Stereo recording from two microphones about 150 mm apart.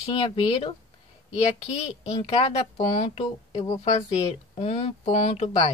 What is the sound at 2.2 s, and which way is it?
A woman's voice, 40° left (ahead or behind).